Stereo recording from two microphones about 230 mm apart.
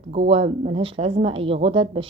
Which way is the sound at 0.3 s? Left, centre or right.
Right.